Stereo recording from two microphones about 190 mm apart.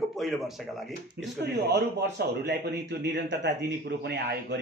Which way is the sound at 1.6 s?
65° right (ahead or behind).